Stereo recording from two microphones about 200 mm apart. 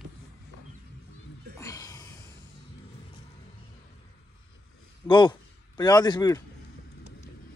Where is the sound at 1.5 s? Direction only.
15° left (ahead or behind).